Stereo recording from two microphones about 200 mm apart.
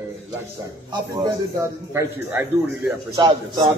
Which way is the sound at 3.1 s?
20° right (ahead or behind).